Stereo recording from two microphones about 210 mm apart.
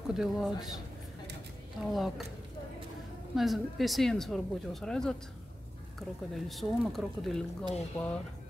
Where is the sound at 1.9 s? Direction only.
Centre (ahead or behind).